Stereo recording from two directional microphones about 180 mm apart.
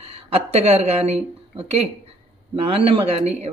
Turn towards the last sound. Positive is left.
turn(degrees=-35)  # may be behind; listen again after turning